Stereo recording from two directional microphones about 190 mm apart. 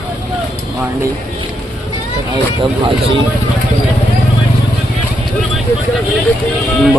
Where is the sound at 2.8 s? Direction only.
30° right (ahead or behind).